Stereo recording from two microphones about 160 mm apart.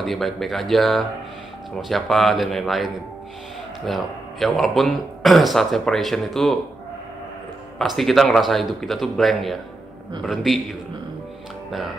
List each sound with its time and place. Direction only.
0.0 s speech: centre (ahead or behind)
7.8 s speech: centre (ahead or behind)